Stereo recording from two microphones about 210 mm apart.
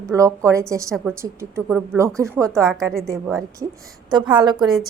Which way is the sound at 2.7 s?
Centre (ahead or behind).